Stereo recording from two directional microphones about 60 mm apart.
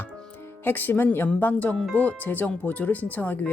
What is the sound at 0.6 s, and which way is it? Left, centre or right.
Speech, left.